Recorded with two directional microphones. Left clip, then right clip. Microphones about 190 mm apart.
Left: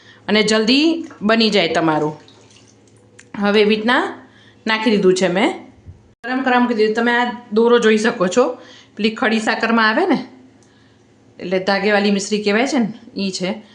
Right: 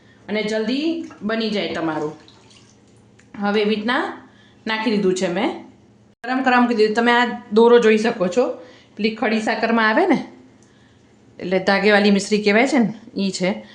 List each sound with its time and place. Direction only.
0.3 s a woman's voice: 50° left (ahead or behind)
1.3 s speech: 35° left (ahead or behind)
3.3 s speech: 30° left (ahead or behind)
6.2 s a woman's voice: 5° right (ahead or behind)
7.8 s speech: centre (ahead or behind)
11.3 s a woman's voice: 5° right (ahead or behind)